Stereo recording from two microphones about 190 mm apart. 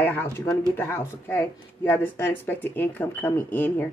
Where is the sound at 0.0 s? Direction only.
10° left (ahead or behind).